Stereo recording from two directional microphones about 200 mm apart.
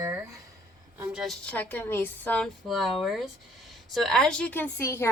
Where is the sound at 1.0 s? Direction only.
5° right (ahead or behind).